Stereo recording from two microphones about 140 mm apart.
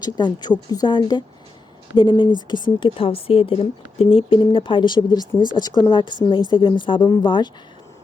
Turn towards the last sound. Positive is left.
turn(degrees=30)  # may be behind; listen again after turning